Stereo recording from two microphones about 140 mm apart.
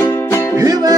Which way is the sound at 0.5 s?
25° right (ahead or behind).